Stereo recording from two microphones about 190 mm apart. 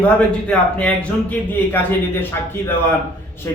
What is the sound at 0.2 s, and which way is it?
Speech, 5° left (ahead or behind).